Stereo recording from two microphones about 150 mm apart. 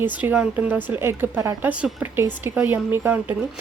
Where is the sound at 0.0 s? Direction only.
10° right (ahead or behind).